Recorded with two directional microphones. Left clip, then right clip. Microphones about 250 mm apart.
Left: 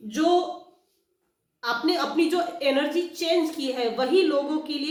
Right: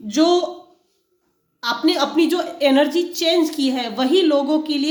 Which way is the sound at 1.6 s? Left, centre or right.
Right.